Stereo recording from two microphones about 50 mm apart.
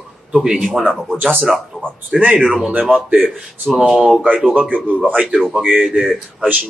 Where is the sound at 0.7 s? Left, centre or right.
Centre.